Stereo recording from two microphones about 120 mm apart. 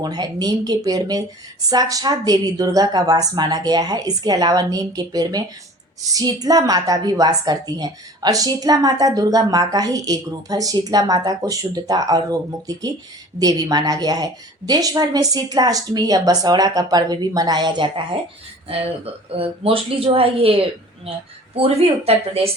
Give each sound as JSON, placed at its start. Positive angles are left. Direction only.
{"t": 0.0, "sound": "a woman's voice", "side_deg": -35}
{"t": 18.7, "sound": "speech", "side_deg": -55}